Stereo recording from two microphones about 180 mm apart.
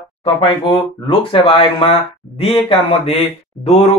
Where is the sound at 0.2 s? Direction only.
30° left (ahead or behind).